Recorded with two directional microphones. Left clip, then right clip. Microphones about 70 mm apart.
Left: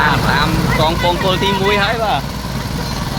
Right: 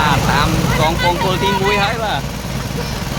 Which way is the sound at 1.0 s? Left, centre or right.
Centre.